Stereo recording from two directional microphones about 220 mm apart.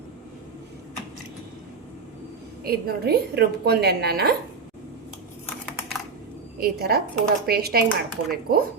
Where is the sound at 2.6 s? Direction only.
45° right (ahead or behind).